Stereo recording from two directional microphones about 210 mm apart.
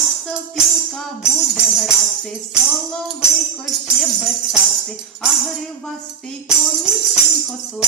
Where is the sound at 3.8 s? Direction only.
Centre (ahead or behind).